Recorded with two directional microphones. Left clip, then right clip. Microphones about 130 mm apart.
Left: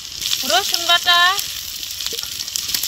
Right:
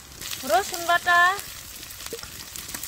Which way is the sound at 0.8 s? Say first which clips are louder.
Left 5 dB; 15° right (ahead or behind).